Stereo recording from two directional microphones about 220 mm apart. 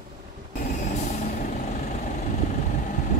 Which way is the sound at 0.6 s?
35° left (ahead or behind).